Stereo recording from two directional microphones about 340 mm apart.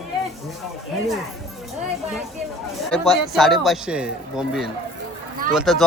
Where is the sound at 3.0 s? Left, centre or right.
Centre.